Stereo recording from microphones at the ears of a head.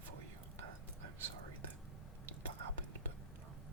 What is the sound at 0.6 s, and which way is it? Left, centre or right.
Whispering, right.